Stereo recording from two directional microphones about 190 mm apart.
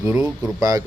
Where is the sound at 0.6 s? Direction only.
15° right (ahead or behind).